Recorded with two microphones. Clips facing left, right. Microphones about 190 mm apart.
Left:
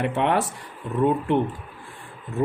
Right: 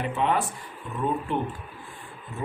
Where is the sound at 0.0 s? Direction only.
75° left (ahead or behind).